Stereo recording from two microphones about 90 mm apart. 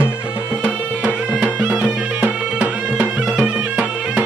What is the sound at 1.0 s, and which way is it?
Music, 10° right (ahead or behind).